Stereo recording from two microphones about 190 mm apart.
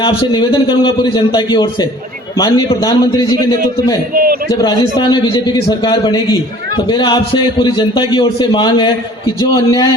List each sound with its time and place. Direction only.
0.0 s a man's voice: 25° left (ahead or behind)
4.1 s a man's voice: 50° right (ahead or behind)
4.5 s a man's voice: 20° left (ahead or behind)